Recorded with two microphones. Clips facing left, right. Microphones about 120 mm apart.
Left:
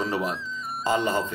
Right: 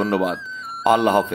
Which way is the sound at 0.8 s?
65° right (ahead or behind).